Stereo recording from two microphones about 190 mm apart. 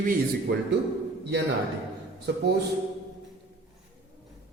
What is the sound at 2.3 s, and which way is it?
Speech, 60° right (ahead or behind).